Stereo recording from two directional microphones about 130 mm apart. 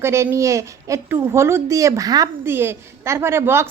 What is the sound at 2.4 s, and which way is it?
A woman's voice, 20° right (ahead or behind).